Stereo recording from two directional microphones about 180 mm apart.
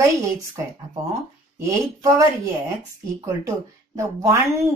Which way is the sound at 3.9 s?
15° right (ahead or behind).